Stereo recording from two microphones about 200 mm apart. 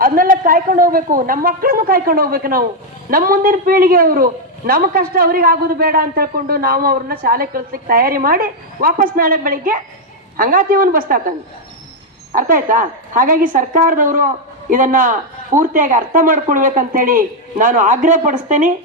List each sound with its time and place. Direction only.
0.0 s a man's voice: 45° right (ahead or behind)
12.3 s a man's voice: 40° right (ahead or behind)